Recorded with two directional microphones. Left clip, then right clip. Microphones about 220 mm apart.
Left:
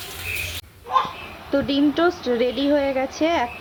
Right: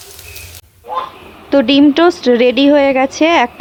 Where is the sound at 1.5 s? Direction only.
45° right (ahead or behind).